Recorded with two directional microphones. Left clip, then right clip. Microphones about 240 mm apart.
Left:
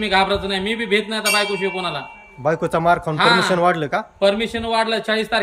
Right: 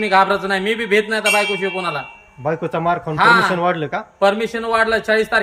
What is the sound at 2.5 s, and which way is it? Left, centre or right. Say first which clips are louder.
Speech: left 2 dB; centre.